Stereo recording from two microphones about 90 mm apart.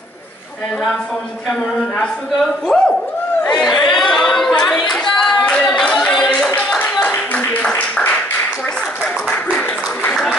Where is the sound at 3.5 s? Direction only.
5° left (ahead or behind).